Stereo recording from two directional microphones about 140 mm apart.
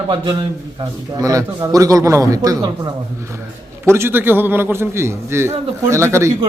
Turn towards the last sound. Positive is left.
turn(degrees=-20)  # may be behind; listen again after turning